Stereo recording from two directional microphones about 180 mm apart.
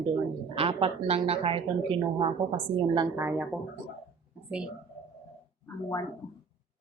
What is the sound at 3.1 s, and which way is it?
Speech, 10° right (ahead or behind).